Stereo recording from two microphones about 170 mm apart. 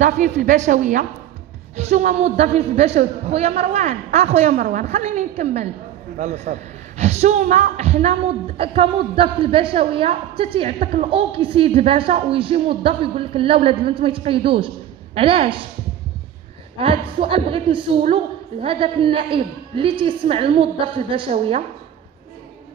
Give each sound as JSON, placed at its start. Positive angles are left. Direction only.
{"t": 0.0, "sound": "a woman's voice", "side_deg": -45}
{"t": 16.7, "sound": "a woman's voice", "side_deg": -35}